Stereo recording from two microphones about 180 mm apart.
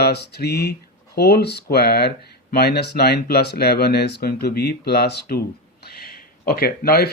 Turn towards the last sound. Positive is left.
turn(degrees=60)  # may be behind; listen again after turning